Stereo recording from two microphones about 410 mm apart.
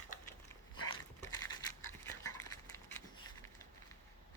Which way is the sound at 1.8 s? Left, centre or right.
Left.